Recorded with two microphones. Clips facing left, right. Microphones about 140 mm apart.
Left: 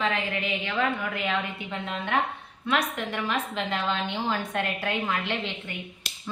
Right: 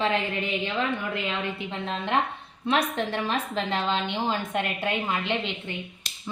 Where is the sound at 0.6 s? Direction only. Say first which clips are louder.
Even; 25° right (ahead or behind).